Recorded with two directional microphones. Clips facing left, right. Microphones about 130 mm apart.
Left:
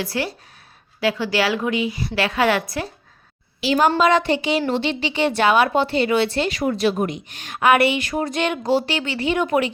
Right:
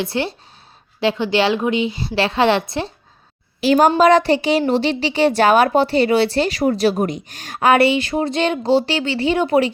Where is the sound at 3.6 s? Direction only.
45° right (ahead or behind).